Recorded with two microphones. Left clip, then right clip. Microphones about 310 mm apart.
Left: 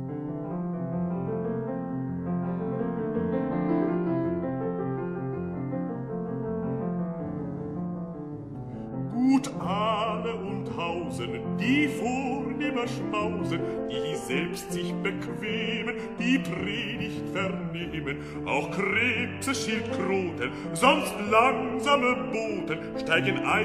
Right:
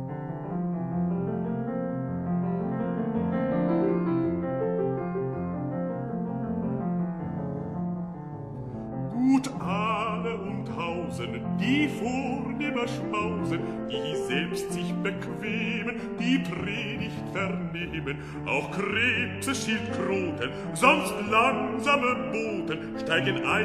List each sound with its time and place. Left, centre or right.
9.1 s music: centre
11.5 s music: centre
15.0 s music: centre
18.5 s music: centre
20.8 s music: centre
21.3 s music: centre